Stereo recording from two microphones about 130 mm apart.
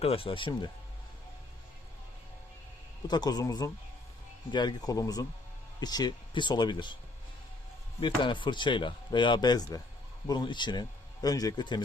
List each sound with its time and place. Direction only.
0.0 s speech: 45° left (ahead or behind)
3.1 s speech: 30° left (ahead or behind)
8.0 s speech: 40° left (ahead or behind)